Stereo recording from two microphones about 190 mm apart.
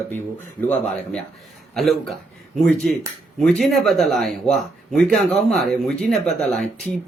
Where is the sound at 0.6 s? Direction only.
10° left (ahead or behind).